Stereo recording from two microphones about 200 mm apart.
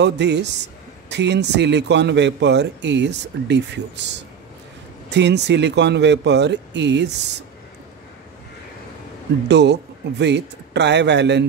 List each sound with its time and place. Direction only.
0.0 s a man's voice: 60° right (ahead or behind)
5.1 s a man's voice: 60° right (ahead or behind)
9.5 s a man's voice: 60° right (ahead or behind)